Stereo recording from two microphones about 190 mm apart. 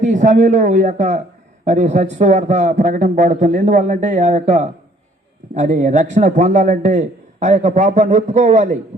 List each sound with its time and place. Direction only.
0.0 s a man's voice: 40° right (ahead or behind)